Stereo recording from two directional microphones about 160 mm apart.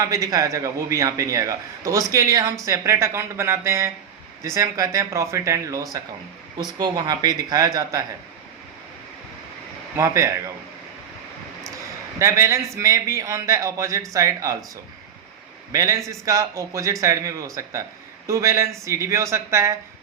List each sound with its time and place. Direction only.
0.0 s a man's voice: 20° right (ahead or behind)
10.0 s a man's voice: 20° right (ahead or behind)
12.2 s a man's voice: 20° right (ahead or behind)
15.7 s a man's voice: 20° right (ahead or behind)